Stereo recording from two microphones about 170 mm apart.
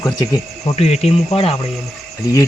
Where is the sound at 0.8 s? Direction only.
35° left (ahead or behind).